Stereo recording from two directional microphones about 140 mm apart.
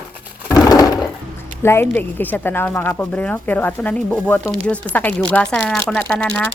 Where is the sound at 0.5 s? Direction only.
25° left (ahead or behind).